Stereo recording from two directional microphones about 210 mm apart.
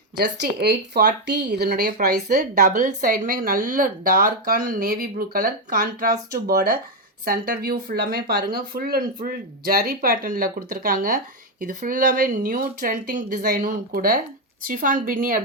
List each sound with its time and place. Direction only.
0.2 s speech: 50° right (ahead or behind)